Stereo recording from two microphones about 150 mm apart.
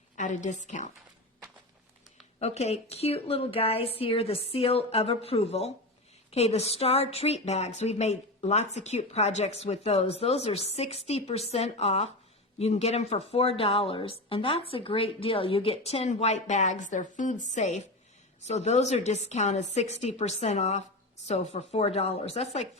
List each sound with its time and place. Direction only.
0.2 s a woman's voice: 55° left (ahead or behind)
2.4 s a woman's voice: 45° left (ahead or behind)